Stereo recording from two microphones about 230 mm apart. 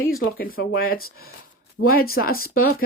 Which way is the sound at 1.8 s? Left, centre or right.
Left.